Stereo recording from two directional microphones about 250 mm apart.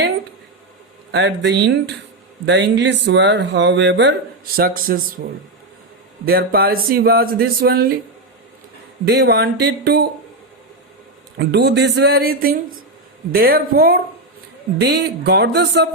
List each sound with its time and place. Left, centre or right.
1.1 s speech: right
6.2 s speech: right
9.0 s speech: right
11.3 s speech: right